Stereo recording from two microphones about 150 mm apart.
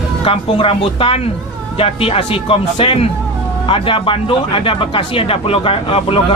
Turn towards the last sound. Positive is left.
turn(degrees=35)  # may be behind; listen again after turning